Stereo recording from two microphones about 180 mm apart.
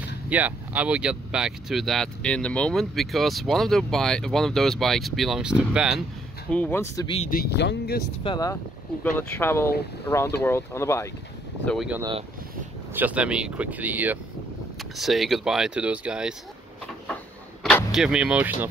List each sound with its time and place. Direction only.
0.3 s speech: 10° right (ahead or behind)
6.5 s speech: 10° left (ahead or behind)
7.2 s speech: 60° left (ahead or behind)
8.2 s speech: 25° left (ahead or behind)
11.6 s speech: 5° left (ahead or behind)
12.0 s speech: 30° right (ahead or behind)
12.9 s speech: 10° right (ahead or behind)
17.6 s speech: centre (ahead or behind)